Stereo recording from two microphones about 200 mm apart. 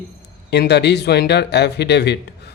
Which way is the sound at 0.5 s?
55° left (ahead or behind).